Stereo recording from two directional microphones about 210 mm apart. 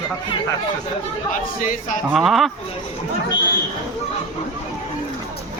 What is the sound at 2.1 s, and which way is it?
Speech, centre (ahead or behind).